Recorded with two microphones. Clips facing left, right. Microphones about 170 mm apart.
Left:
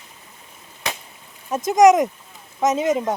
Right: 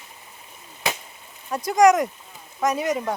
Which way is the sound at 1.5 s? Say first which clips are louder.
Left 3 dB; 20° left (ahead or behind).